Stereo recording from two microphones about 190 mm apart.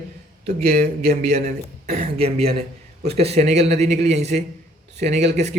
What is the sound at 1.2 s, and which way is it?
Speech, 35° right (ahead or behind).